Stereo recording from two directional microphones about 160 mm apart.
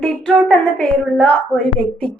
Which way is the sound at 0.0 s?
5° left (ahead or behind).